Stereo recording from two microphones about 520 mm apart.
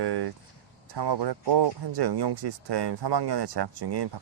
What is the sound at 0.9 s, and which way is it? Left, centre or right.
Speech, right.